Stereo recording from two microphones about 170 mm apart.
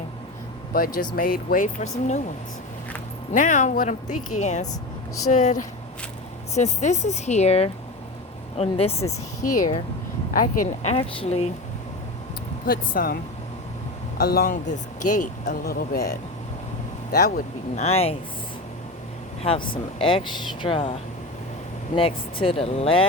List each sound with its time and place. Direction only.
0.7 s speech: 60° left (ahead or behind)
3.3 s speech: 50° left (ahead or behind)
10.3 s speech: 50° left (ahead or behind)
10.9 s speech: 35° left (ahead or behind)
12.6 s speech: 60° left (ahead or behind)
14.2 s speech: 60° left (ahead or behind)
17.1 s speech: 50° left (ahead or behind)
19.4 s speech: 30° left (ahead or behind)